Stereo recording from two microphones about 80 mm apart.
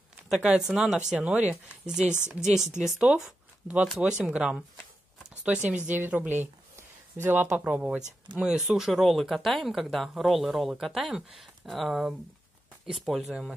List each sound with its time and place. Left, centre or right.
0.3 s speech: centre; by 6.5 s right
7.5 s speech: centre
8.4 s speech: centre
13.3 s speech: centre